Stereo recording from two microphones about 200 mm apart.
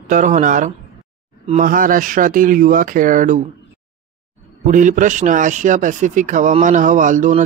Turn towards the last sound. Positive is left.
turn(degrees=-40)  # may be behind; listen again after turning